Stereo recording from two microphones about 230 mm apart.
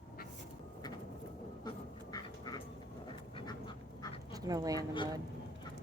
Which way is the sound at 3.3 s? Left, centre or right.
Left.